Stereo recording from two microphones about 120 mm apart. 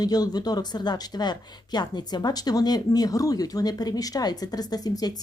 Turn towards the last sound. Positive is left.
turn(degrees=35)  # may be behind; listen again after turning